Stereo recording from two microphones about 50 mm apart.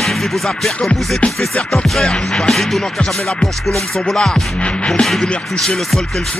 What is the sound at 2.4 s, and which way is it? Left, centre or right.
Music, centre.